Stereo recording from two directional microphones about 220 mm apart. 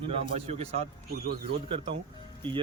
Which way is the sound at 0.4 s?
30° right (ahead or behind).